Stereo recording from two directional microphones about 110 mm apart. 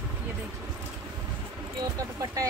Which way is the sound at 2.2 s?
30° right (ahead or behind).